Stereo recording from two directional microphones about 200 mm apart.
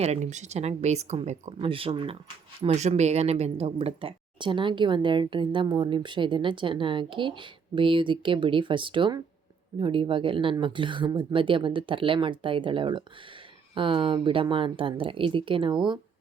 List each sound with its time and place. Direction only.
0.0 s speech: 35° right (ahead or behind)